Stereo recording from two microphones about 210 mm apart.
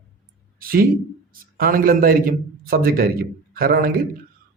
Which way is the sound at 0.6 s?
45° right (ahead or behind).